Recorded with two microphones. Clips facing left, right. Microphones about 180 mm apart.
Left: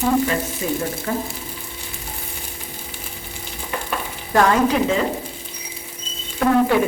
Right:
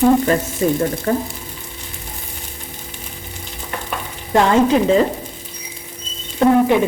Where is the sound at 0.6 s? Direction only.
45° right (ahead or behind).